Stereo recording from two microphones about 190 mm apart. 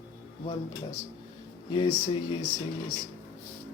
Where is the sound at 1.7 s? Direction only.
25° left (ahead or behind).